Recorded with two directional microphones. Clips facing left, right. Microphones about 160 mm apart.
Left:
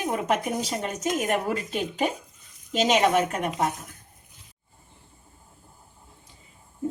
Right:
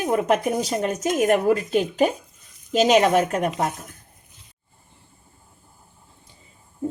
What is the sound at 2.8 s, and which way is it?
Speech, 40° right (ahead or behind).